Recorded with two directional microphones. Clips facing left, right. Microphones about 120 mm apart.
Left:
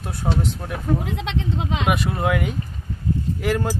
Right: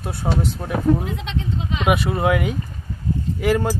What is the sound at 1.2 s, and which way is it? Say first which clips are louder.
Speech: left 1 dB; 90° left.